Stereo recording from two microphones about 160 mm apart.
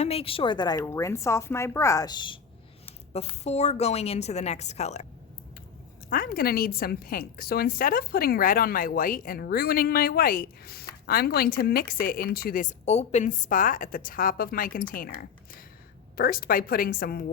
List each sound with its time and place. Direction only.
0.0 s a woman's voice: 35° left (ahead or behind)
3.1 s a woman's voice: 40° left (ahead or behind)
6.1 s a woman's voice: 65° left (ahead or behind)